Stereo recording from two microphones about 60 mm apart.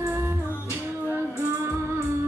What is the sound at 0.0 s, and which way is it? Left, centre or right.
Music, right.